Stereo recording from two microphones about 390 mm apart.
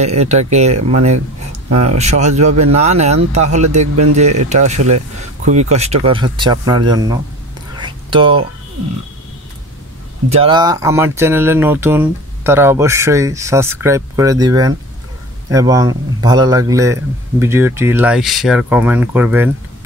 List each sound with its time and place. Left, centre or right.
0.0 s speech: centre
7.7 s whispering: centre
10.3 s a man's voice: centre